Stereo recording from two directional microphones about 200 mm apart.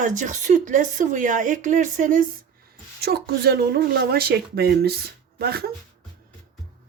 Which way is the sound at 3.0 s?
50° right (ahead or behind).